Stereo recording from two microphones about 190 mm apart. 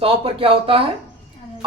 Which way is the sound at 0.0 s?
30° right (ahead or behind).